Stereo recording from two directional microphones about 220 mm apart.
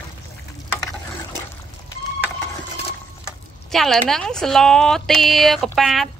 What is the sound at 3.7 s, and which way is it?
Speech, centre (ahead or behind).